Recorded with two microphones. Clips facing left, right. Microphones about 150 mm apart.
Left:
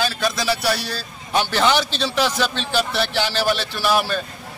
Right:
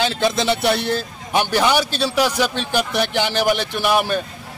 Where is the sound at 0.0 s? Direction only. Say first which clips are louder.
Right 3 dB; 20° right (ahead or behind).